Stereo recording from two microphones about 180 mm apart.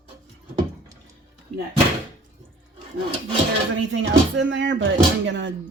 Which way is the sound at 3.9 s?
90° right.